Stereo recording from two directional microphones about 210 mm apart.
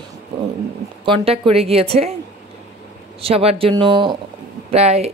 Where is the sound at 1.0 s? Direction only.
25° right (ahead or behind).